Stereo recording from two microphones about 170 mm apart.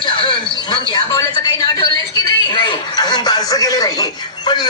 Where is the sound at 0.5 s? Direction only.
25° left (ahead or behind).